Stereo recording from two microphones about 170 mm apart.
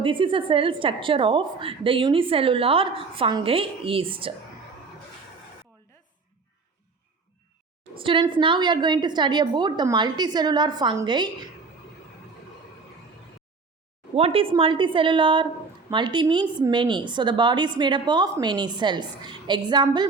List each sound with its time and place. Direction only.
0.0 s a woman's voice: 30° right (ahead or behind)
7.9 s a woman's voice: 30° right (ahead or behind)
14.2 s a woman's voice: 35° right (ahead or behind)